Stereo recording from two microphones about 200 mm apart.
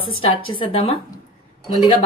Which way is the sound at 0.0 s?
25° left (ahead or behind).